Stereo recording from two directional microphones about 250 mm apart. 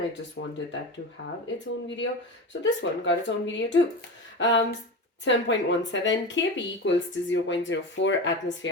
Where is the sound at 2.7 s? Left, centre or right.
Left.